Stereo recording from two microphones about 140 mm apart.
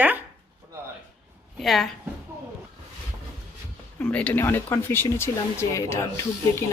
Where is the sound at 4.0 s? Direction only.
10° left (ahead or behind).